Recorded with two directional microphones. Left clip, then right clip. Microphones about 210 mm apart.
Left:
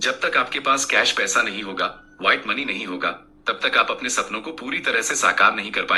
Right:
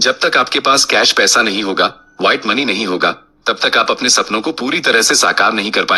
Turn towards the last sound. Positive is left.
turn(degrees=-50)  # may be behind; listen again after turning